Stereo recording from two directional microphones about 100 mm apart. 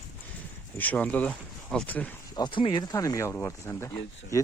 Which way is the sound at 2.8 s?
35° left (ahead or behind).